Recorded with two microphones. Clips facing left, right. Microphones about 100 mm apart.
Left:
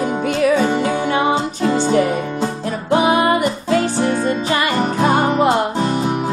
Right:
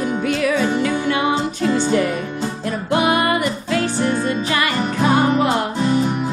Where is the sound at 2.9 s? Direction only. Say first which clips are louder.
Left 3 dB; 25° left (ahead or behind).